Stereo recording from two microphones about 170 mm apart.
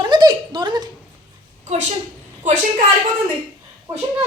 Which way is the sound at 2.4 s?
45° right (ahead or behind).